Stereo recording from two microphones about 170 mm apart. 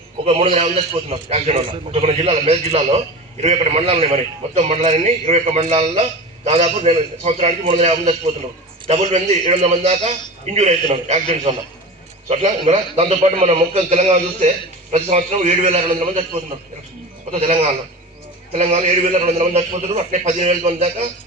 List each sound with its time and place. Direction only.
0.3 s a man's voice: 35° right (ahead or behind)